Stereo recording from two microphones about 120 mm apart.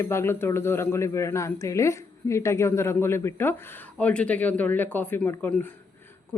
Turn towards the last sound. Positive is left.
turn(degrees=15)  # may be behind; listen again after turning